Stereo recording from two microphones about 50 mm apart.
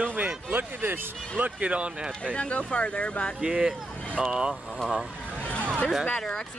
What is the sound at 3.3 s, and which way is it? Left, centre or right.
Speech, centre.